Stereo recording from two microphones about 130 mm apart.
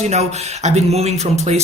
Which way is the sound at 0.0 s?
60° right (ahead or behind).